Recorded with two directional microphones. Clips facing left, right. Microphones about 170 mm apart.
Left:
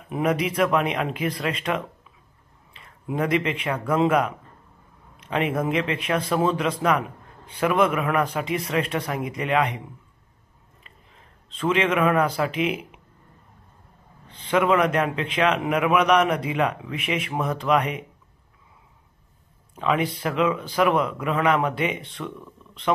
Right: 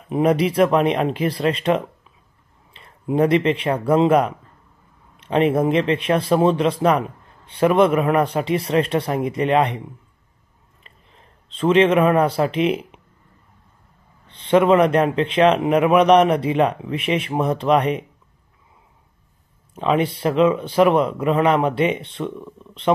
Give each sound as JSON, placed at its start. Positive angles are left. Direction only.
{"t": 0.1, "sound": "speech", "side_deg": -30}
{"t": 5.3, "sound": "speech", "side_deg": -30}
{"t": 11.4, "sound": "speech", "side_deg": -30}
{"t": 14.3, "sound": "speech", "side_deg": -30}
{"t": 19.7, "sound": "speech", "side_deg": -25}